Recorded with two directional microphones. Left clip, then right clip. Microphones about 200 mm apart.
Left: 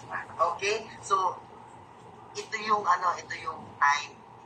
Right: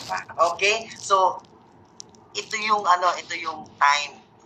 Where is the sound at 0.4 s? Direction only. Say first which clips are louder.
Right 7 dB; 20° right (ahead or behind).